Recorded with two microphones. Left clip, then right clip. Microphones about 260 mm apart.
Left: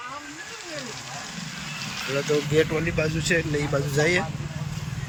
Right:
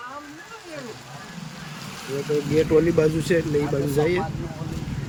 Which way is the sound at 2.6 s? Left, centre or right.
Centre.